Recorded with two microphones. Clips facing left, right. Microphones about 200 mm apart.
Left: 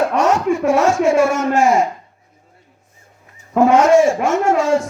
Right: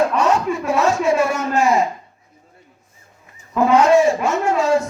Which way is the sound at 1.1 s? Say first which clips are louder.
Left 4 dB; 90° left.